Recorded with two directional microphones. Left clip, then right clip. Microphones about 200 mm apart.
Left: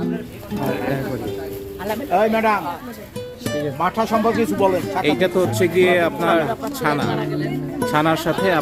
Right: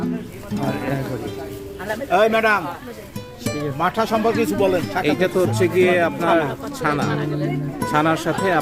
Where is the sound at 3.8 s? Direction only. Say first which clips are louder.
Even; 50° right (ahead or behind).